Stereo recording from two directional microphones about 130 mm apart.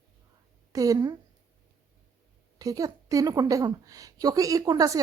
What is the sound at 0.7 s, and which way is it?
Speech, 25° right (ahead or behind).